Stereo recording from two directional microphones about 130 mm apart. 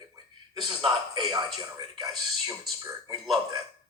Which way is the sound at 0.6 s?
35° right (ahead or behind).